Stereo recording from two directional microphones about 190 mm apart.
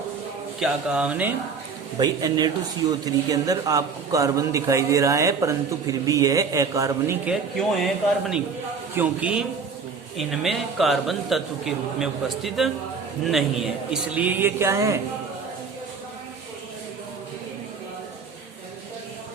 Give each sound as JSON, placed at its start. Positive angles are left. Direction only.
{"t": 0.6, "sound": "a man's voice", "side_deg": -5}
{"t": 2.0, "sound": "a man's voice", "side_deg": -20}
{"t": 7.3, "sound": "a man's voice", "side_deg": 0}
{"t": 9.0, "sound": "a man's voice", "side_deg": -5}